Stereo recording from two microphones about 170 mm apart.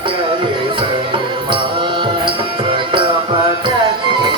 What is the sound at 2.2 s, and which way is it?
Music, 30° right (ahead or behind).